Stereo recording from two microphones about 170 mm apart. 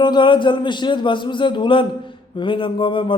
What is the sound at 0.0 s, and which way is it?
A man's voice, 25° left (ahead or behind).